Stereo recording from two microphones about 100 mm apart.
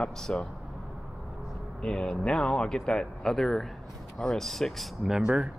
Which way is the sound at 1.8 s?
10° left (ahead or behind).